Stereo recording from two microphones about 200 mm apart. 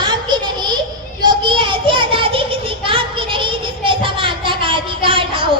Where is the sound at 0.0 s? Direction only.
20° right (ahead or behind).